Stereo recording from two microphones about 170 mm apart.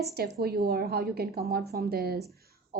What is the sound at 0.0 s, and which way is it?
A woman's voice, 70° right (ahead or behind).